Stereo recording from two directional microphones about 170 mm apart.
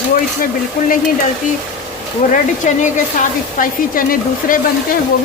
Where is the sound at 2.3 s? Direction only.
45° left (ahead or behind).